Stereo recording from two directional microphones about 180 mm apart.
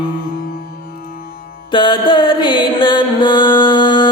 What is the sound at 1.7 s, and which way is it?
Music, 25° left (ahead or behind).